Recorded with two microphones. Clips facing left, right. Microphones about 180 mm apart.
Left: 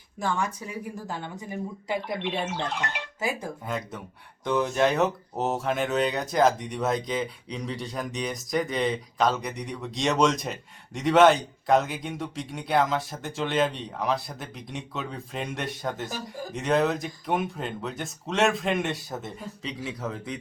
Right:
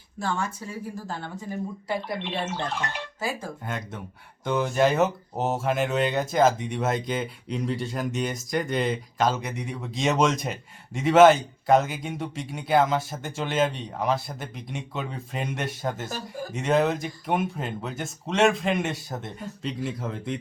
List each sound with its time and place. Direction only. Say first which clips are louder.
0.2 s speech: left 1 dB; 15° left (ahead or behind)
3.7 s speech: left 2 dB; centre (ahead or behind)